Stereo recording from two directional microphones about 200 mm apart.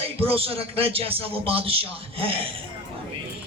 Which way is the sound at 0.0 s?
30° right (ahead or behind).